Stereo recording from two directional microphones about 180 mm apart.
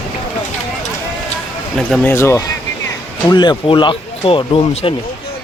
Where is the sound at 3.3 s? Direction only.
25° left (ahead or behind).